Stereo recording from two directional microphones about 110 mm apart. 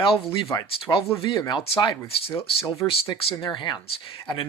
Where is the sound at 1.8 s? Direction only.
30° left (ahead or behind).